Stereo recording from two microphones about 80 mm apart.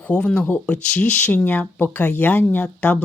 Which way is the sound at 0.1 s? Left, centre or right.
Centre.